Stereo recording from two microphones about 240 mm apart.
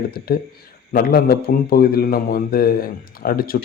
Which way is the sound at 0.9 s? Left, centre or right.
Left.